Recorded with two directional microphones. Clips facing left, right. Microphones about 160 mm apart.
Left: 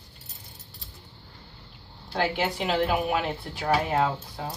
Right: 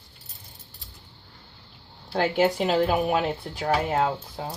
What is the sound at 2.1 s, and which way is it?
Speech, 45° right (ahead or behind).